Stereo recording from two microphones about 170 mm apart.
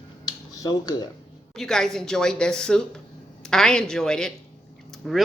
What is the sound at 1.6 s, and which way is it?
Speech, centre (ahead or behind).